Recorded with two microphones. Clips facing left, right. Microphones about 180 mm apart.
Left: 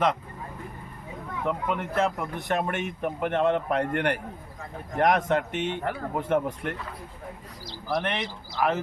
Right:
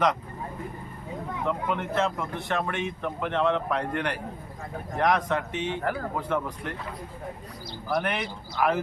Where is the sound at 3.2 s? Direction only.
55° left (ahead or behind).